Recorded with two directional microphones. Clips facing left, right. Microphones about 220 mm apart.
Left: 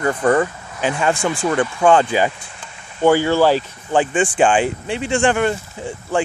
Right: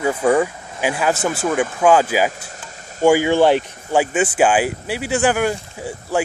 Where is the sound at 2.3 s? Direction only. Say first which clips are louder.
Right 3 dB; 40° right (ahead or behind).